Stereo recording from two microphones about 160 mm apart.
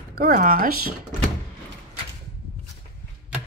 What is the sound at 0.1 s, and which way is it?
Speech, 65° right (ahead or behind).